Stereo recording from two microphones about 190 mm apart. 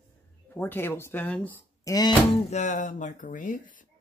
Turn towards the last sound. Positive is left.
turn(degrees=45)  # may be behind; listen again after turning